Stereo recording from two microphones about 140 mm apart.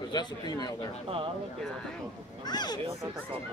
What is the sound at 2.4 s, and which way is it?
Speech, 30° left (ahead or behind).